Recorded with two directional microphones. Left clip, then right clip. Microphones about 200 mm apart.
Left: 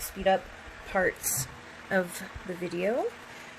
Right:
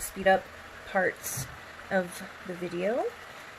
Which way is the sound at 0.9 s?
15° left (ahead or behind).